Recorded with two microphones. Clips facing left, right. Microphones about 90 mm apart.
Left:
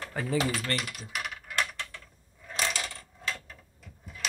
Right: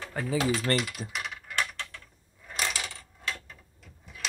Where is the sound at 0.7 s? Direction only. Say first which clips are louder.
Right 4 dB; 5° left (ahead or behind).